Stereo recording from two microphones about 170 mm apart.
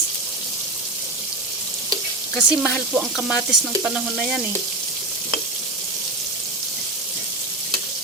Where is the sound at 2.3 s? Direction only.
5° left (ahead or behind).